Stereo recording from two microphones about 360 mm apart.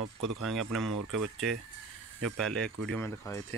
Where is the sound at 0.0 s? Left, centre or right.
Right.